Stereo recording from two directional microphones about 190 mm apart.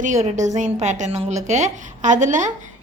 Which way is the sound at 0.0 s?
40° right (ahead or behind).